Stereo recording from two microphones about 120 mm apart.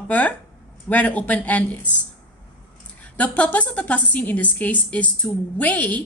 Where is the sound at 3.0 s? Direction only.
15° left (ahead or behind).